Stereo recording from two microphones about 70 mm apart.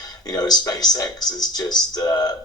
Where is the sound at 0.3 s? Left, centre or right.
Left.